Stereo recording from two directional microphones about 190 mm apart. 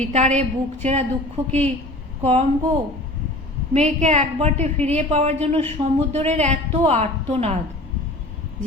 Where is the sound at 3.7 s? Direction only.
35° right (ahead or behind).